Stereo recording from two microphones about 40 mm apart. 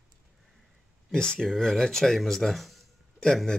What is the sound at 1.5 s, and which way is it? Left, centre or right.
Speech, centre.